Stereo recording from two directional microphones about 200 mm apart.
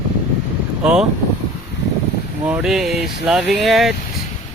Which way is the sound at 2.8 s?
50° right (ahead or behind).